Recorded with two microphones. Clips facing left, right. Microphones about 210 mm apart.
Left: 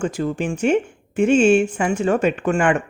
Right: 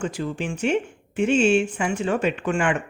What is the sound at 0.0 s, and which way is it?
Speech, 45° left (ahead or behind).